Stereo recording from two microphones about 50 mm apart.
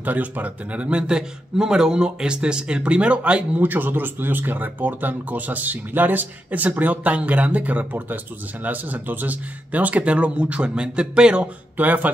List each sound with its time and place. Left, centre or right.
0.0 s a man's voice: right
3.6 s a man's voice: right; by 11.4 s centre
11.7 s speech: right